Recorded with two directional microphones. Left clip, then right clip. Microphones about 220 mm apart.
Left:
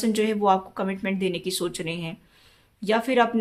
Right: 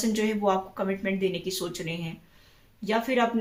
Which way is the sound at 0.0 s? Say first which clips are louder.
Left 4 dB; 50° left (ahead or behind).